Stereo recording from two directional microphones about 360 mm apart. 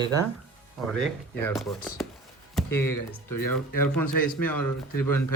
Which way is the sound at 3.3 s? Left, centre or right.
Left.